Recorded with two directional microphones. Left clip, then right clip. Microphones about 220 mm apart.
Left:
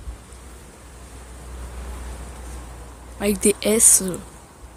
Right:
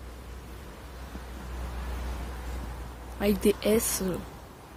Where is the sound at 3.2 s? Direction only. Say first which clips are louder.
Left 5 dB; 15° left (ahead or behind).